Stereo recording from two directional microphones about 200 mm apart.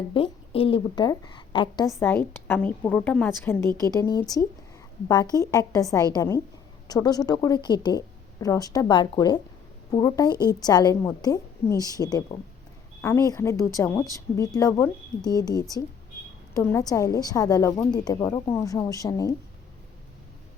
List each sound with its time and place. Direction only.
0.1 s a woman's voice: 25° left (ahead or behind)